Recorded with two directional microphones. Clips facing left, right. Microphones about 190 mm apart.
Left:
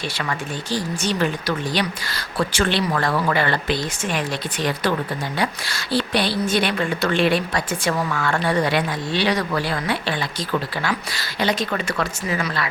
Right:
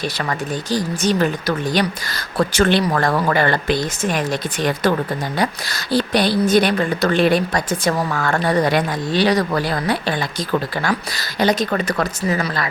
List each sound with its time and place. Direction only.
0.3 s a woman's voice: 40° right (ahead or behind)